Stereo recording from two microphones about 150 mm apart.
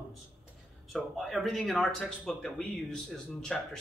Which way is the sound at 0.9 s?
Centre (ahead or behind).